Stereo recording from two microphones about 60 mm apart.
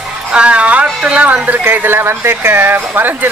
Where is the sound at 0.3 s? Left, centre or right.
Centre.